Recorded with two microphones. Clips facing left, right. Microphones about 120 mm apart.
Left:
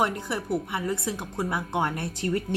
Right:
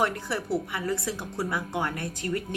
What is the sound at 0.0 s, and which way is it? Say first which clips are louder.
A woman's voice: left 1 dB; 20° left (ahead or behind).